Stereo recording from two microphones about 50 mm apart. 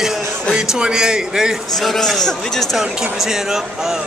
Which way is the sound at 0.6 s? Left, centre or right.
Centre.